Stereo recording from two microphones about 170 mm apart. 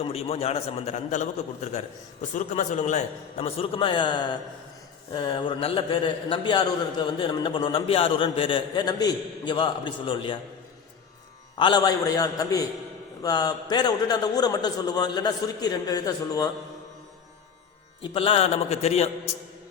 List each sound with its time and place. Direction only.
0.0 s a man's voice: 35° left (ahead or behind)
11.5 s a man's voice: 25° left (ahead or behind)
18.0 s a man's voice: 30° left (ahead or behind)